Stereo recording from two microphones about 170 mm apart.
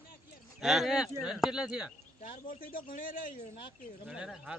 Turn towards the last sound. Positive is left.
turn(degrees=-5)  # may be behind; listen again after turning